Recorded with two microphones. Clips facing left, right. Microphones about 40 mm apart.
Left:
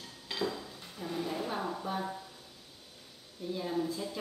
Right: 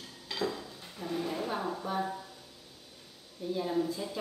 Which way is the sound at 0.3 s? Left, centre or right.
Centre.